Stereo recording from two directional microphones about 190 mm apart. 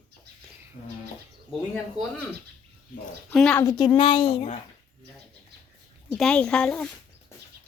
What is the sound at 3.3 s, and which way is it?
Speech, 5° left (ahead or behind).